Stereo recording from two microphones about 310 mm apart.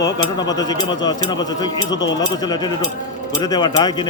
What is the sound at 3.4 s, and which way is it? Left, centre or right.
Speech, centre.